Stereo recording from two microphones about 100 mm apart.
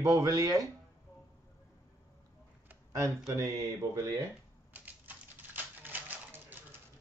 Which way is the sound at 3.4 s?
30° right (ahead or behind).